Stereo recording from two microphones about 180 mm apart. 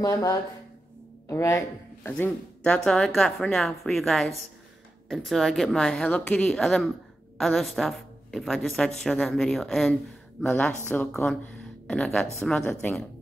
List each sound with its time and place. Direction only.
0.0 s a woman's voice: 20° left (ahead or behind); by 13.0 s 5° left (ahead or behind)